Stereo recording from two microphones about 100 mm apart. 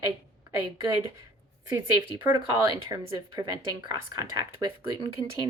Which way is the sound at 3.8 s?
35° right (ahead or behind).